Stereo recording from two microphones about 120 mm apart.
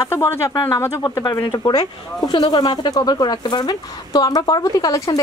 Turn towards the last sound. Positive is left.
turn(degrees=30)  # may be behind; listen again after turning